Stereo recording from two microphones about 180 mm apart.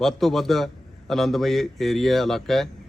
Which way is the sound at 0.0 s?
Centre (ahead or behind).